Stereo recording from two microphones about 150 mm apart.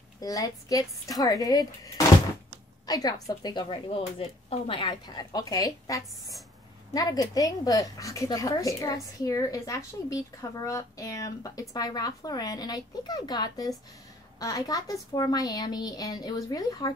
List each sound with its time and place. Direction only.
0.2 s a woman's voice: 25° left (ahead or behind)